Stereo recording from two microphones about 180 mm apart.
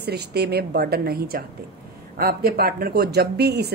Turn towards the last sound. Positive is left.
turn(degrees=-65)  # may be behind; listen again after turning